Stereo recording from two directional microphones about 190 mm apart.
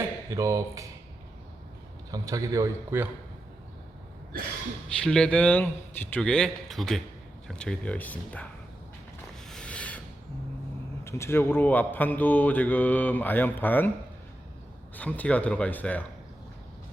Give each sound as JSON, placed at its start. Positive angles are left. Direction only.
{"t": 0.3, "sound": "speech", "side_deg": -15}
{"t": 2.0, "sound": "a man's voice", "side_deg": -20}
{"t": 4.9, "sound": "a man's voice", "side_deg": 5}
{"t": 9.5, "sound": "a sound", "side_deg": 5}
{"t": 11.0, "sound": "speech", "side_deg": 15}
{"t": 14.9, "sound": "speech", "side_deg": 10}